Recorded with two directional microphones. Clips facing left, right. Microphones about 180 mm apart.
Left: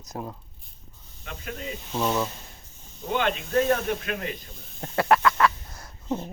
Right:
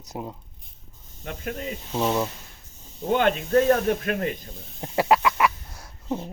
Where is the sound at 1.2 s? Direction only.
45° right (ahead or behind).